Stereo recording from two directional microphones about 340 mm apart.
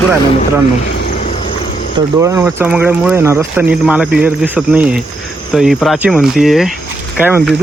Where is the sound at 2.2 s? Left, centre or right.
Centre.